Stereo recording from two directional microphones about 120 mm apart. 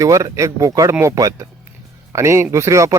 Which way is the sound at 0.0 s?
25° right (ahead or behind).